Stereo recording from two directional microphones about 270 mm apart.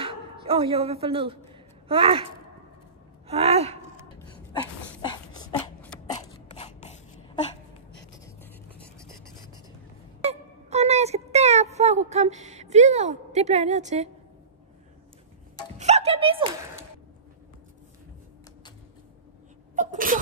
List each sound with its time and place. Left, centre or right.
0.0 s speech: centre
3.3 s speech: right
5.3 s a sound: centre
7.9 s writing: left
8.7 s writing: centre
10.2 s a sound: right
15.8 s music: right
19.7 s sneeze: right